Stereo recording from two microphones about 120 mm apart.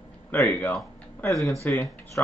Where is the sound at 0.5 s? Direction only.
15° left (ahead or behind).